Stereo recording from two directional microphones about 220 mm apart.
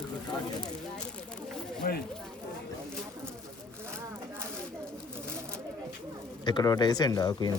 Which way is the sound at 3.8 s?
10° right (ahead or behind).